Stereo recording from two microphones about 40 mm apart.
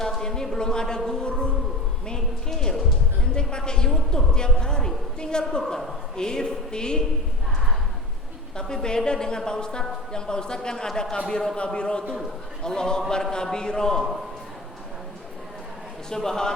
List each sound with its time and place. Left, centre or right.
0.2 s a woman's voice: centre
8.5 s a woman's voice: centre
16.0 s speech: centre